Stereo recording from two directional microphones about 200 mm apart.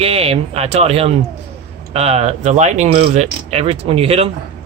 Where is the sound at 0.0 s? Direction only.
30° right (ahead or behind).